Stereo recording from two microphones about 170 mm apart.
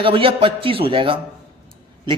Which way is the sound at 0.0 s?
30° right (ahead or behind).